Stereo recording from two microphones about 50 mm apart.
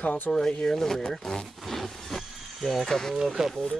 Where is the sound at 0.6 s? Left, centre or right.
Centre.